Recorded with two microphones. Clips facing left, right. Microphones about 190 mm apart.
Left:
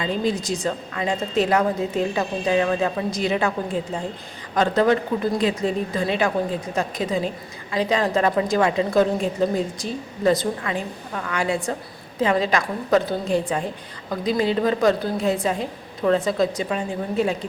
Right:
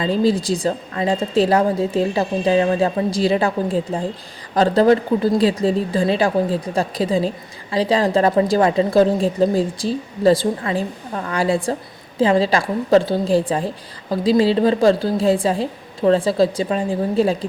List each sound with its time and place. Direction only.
0.0 s a woman's voice: 35° right (ahead or behind)